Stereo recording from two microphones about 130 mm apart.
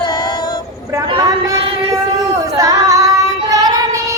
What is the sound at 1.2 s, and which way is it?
Female singing, 30° right (ahead or behind).